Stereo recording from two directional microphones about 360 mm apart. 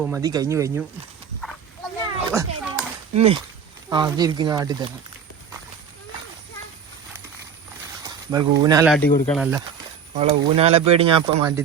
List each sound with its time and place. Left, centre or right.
0.0 s speech: centre
2.0 s children playing: centre
3.2 s speech: centre
8.0 s speech: centre
10.2 s speech: centre